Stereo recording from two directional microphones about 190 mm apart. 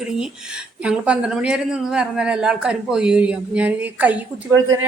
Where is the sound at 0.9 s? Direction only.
5° right (ahead or behind).